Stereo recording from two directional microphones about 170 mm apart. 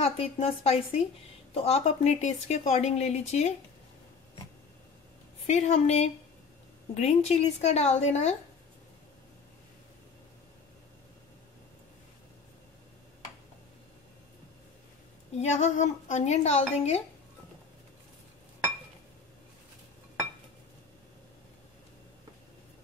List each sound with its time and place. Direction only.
0.0 s speech: 35° left (ahead or behind)
5.5 s speech: 45° left (ahead or behind)
15.3 s speech: 45° left (ahead or behind)